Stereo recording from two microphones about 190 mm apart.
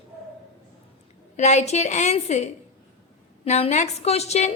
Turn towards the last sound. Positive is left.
turn(degrees=35)  # may be behind; listen again after turning